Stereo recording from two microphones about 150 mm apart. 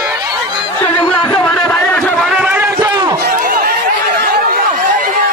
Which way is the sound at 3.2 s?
85° right.